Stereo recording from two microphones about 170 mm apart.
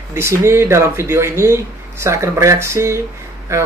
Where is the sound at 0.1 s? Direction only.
15° right (ahead or behind).